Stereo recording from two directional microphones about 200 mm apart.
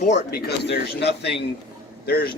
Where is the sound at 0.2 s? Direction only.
50° left (ahead or behind).